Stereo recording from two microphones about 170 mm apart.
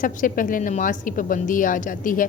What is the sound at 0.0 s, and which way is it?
A woman's voice, 50° left (ahead or behind).